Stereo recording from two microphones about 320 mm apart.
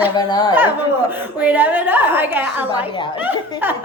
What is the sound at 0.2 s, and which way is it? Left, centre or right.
Speech, centre.